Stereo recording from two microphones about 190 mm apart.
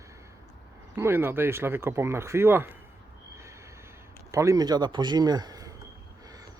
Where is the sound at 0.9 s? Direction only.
10° right (ahead or behind).